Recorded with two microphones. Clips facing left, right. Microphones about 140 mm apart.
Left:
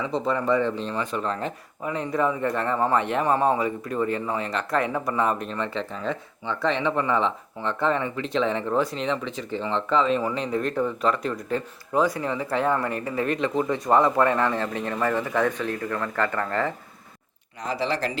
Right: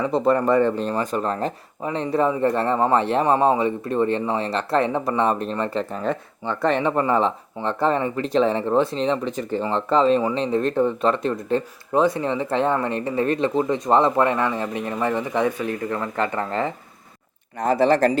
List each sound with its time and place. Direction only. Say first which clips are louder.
0.0 s speech: right 6 dB; 55° right (ahead or behind); by 3.3 s 30° right (ahead or behind)
3.3 s speech: right 4 dB; 20° right (ahead or behind)
17.6 s speech: right 9 dB; 50° right (ahead or behind)